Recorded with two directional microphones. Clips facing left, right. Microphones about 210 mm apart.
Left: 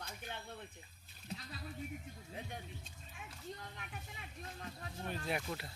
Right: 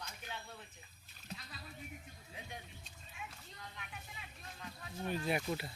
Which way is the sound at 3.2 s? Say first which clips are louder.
Right 3 dB; 50° left (ahead or behind).